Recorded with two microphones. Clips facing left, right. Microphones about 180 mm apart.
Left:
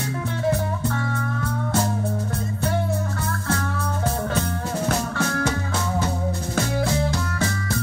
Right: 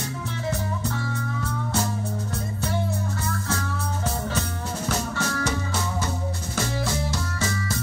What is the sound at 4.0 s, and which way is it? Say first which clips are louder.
Music: left 4 dB; 55° left (ahead or behind).